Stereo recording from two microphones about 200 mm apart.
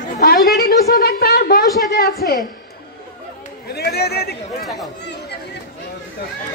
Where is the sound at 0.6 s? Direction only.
50° left (ahead or behind).